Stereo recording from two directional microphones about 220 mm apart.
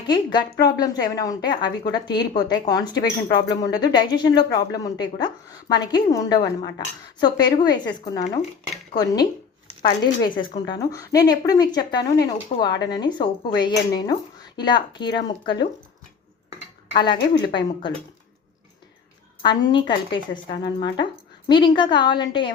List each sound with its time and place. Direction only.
0.1 s a woman's voice: 20° left (ahead or behind)
16.9 s a woman's voice: 20° left (ahead or behind)
19.4 s a woman's voice: 20° left (ahead or behind)